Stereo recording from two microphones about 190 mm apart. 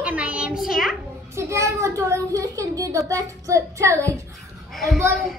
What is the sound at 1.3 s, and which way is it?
A child's voice, 15° right (ahead or behind).